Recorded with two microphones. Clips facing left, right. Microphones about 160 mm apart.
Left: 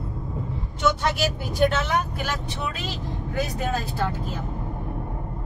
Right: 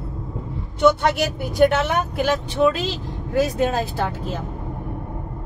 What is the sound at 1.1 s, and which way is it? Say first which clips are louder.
Speech: right 3 dB; 60° right (ahead or behind).